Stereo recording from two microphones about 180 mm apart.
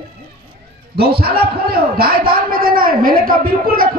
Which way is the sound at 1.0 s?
60° right (ahead or behind).